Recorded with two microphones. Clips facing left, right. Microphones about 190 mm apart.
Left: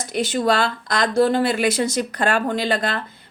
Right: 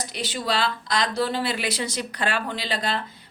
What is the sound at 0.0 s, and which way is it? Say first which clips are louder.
Speech: left 9 dB; 50° left (ahead or behind).